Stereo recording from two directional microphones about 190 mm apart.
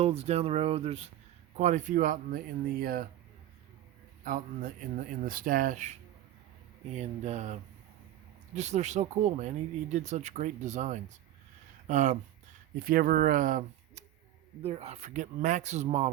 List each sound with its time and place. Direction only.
0.0 s speech: 35° right (ahead or behind); by 3.1 s 50° right (ahead or behind)
4.2 s speech: 45° right (ahead or behind)
14.6 s speech: 35° right (ahead or behind)